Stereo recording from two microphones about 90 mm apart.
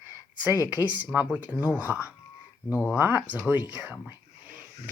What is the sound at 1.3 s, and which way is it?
Speech, 15° left (ahead or behind).